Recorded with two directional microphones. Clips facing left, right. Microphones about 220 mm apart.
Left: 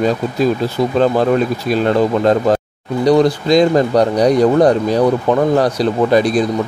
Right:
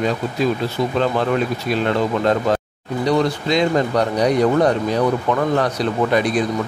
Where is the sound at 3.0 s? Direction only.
40° left (ahead or behind).